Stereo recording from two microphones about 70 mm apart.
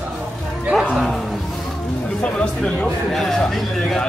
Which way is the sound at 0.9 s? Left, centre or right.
Centre.